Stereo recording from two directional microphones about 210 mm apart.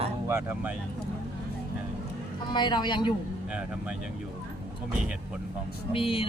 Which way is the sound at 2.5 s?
20° left (ahead or behind).